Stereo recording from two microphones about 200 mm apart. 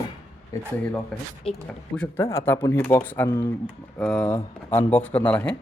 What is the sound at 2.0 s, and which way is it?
Speech, 10° left (ahead or behind).